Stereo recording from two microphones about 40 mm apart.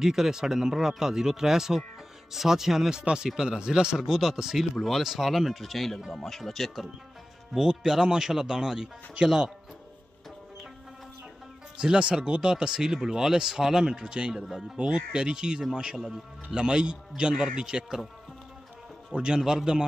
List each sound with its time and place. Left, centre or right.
0.0 s speech: centre
3.0 s a man's voice: right
4.7 s speech: centre
7.5 s a man's voice: centre
11.7 s a man's voice: right
19.1 s a man's voice: centre